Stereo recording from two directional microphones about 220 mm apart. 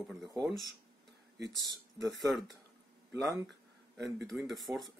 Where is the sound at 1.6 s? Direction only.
15° right (ahead or behind).